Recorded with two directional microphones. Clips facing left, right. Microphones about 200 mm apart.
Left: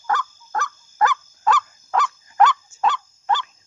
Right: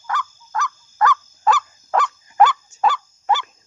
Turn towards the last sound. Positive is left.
turn(degrees=-5)  # may be behind; listen again after turning